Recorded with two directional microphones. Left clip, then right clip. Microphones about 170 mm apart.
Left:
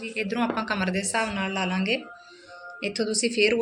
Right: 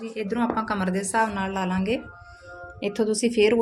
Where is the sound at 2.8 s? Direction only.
40° right (ahead or behind).